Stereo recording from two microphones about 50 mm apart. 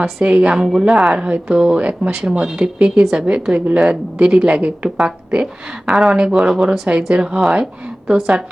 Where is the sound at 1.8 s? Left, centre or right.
Right.